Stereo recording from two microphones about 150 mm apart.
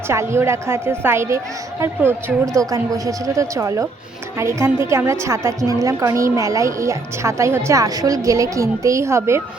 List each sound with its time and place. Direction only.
0.1 s a woman's voice: 15° right (ahead or behind)